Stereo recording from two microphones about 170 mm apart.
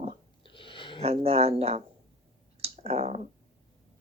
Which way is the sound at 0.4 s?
30° left (ahead or behind).